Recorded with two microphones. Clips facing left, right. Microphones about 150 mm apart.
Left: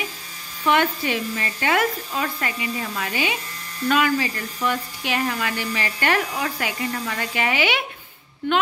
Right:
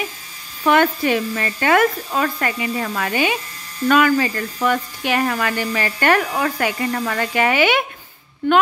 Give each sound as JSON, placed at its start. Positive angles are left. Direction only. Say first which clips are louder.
{"t": 0.7, "sound": "speech", "louder": "right 5 dB", "side_deg": -50}